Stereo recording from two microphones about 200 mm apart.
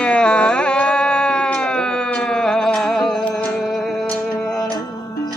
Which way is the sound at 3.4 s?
Centre (ahead or behind).